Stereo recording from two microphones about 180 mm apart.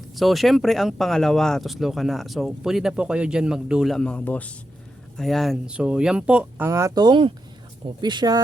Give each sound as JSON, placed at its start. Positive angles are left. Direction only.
{"t": 0.2, "sound": "speech", "side_deg": 0}